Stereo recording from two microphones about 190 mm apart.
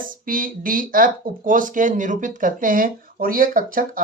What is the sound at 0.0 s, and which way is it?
Speech, 45° right (ahead or behind).